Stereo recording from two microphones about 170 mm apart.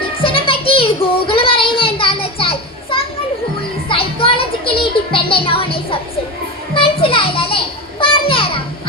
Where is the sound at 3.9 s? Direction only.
30° left (ahead or behind).